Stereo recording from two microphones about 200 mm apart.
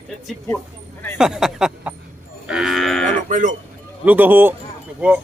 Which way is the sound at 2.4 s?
5° right (ahead or behind).